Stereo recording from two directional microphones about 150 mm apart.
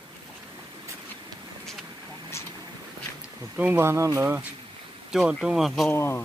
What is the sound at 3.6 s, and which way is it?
Speech, 15° right (ahead or behind).